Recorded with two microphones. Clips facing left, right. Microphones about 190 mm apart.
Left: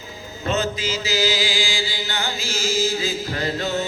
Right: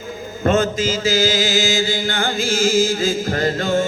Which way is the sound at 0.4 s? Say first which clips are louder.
Right 7 dB; 50° right (ahead or behind).